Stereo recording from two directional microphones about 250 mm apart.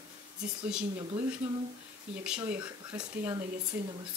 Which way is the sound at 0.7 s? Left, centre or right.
Centre.